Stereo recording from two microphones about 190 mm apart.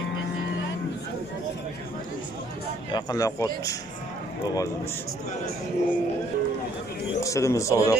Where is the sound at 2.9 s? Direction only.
20° left (ahead or behind).